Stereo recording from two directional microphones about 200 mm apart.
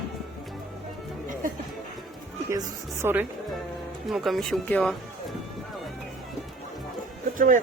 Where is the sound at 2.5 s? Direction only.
15° right (ahead or behind).